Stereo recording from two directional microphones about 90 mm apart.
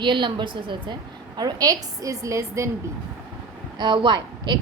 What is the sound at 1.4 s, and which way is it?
A woman's voice, 45° right (ahead or behind).